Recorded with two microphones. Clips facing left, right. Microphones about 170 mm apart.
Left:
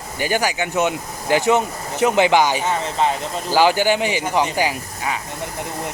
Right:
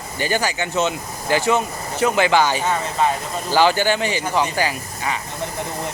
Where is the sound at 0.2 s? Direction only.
10° left (ahead or behind).